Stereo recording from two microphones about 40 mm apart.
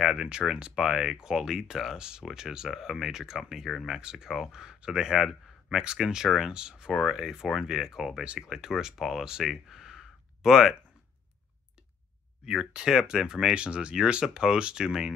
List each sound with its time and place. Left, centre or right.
0.0 s speech: centre
2.0 s speech: right
2.7 s speech: centre
4.0 s speech: centre
6.5 s speech: right
7.0 s speech: centre
9.4 s a sound: centre
12.4 s speech: centre
13.6 s speech: right
14.2 s speech: centre